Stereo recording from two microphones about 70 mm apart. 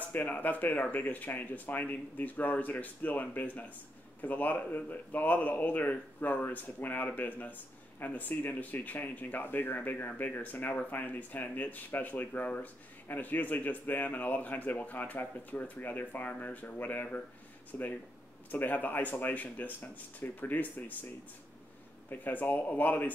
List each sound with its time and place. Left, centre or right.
0.1 s speech: left
22.1 s speech: left